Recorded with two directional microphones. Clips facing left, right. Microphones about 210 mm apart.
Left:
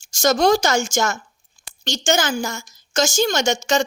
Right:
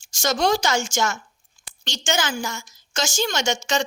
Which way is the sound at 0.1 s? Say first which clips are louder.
Left 5 dB; 40° left (ahead or behind).